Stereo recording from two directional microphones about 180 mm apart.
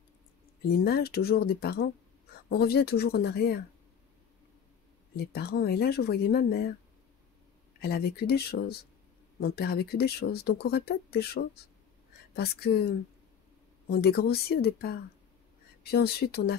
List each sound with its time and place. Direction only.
0.7 s speech: 60° left (ahead or behind)
5.1 s speech: 60° left (ahead or behind)
7.8 s speech: 60° left (ahead or behind)
13.8 s speech: 60° left (ahead or behind)